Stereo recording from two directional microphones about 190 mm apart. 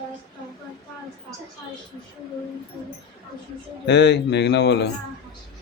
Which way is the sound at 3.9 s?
65° left (ahead or behind).